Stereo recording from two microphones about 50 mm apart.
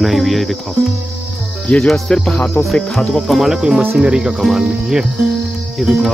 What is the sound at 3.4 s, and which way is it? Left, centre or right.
Cricket, centre.